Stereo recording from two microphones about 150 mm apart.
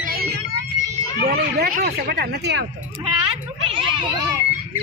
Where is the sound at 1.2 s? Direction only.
90° right.